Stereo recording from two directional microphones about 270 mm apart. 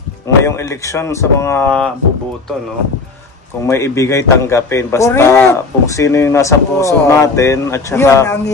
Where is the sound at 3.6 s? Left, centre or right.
Centre.